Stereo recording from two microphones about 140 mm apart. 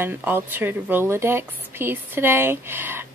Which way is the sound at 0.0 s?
15° right (ahead or behind).